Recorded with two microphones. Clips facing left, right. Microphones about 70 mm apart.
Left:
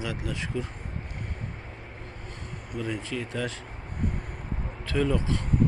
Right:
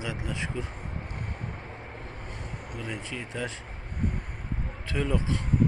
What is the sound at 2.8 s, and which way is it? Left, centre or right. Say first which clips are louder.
Speech: left 4 dB; centre.